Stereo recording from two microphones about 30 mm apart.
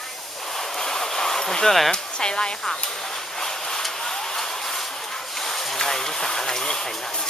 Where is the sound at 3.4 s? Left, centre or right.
Centre.